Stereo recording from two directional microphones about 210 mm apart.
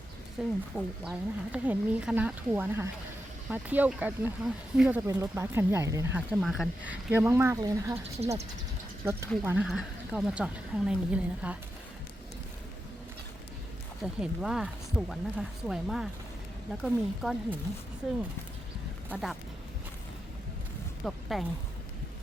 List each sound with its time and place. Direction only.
0.4 s speech: 5° right (ahead or behind)
6.3 s speech: centre (ahead or behind); by 7.9 s 15° right (ahead or behind)
8.2 s speech: 30° right (ahead or behind)
9.4 s speech: 10° right (ahead or behind)
14.0 s speech: centre (ahead or behind)
19.0 s speech: 5° right (ahead or behind)
21.0 s speech: centre (ahead or behind)